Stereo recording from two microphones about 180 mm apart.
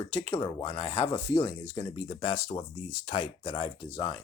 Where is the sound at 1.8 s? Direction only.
35° left (ahead or behind).